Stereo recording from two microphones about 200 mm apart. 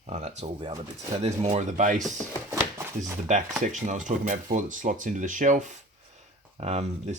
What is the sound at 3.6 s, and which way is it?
Speech, 40° right (ahead or behind).